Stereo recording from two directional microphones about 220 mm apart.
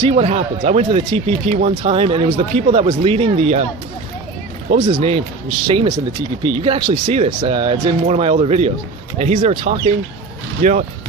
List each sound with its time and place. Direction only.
0.0 s speech: 30° right (ahead or behind)
4.6 s speech: 25° right (ahead or behind)